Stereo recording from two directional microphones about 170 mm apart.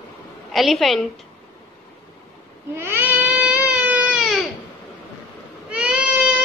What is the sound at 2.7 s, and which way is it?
Baby cry, 15° right (ahead or behind).